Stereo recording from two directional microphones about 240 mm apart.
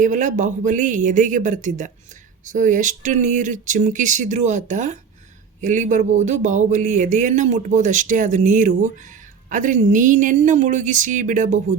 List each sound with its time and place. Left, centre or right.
0.0 s speech: right